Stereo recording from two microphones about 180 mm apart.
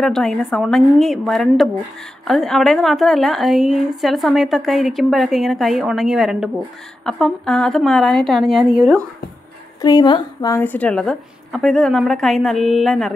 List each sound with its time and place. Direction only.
0.0 s a woman's voice: 5° left (ahead or behind)
9.8 s speech: 20° left (ahead or behind)
10.6 s a woman's voice: 10° left (ahead or behind)